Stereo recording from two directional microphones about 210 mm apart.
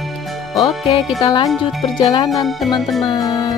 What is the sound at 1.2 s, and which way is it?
Speech, 20° left (ahead or behind).